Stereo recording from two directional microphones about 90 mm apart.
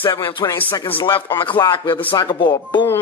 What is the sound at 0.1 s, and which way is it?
Speech, 50° left (ahead or behind).